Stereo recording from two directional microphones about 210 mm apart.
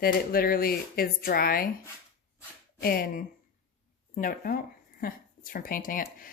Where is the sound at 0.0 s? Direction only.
45° left (ahead or behind).